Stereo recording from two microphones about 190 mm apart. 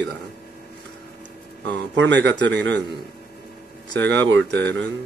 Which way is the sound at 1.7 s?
70° right (ahead or behind).